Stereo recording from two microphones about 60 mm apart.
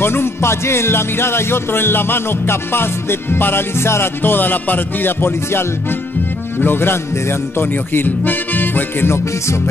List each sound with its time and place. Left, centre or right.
0.0 s music: left